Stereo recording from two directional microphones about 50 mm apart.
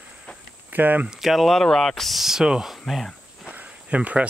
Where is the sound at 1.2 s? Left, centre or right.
Centre.